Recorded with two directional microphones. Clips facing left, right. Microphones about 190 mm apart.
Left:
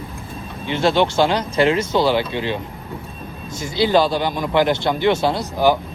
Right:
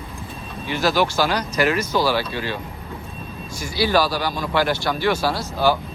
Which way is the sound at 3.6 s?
20° left (ahead or behind).